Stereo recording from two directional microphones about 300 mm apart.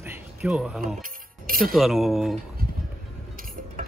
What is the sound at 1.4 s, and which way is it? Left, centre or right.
Music, right.